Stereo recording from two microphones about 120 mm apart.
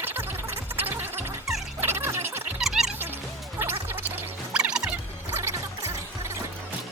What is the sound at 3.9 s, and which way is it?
Music, 10° right (ahead or behind).